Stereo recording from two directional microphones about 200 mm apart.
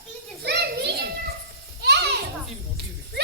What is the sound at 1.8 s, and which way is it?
Children playing, 55° right (ahead or behind).